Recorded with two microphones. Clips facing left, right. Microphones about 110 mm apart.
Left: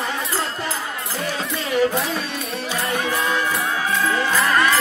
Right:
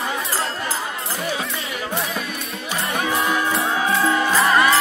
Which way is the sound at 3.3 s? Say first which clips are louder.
Right 1 dB; 20° right (ahead or behind).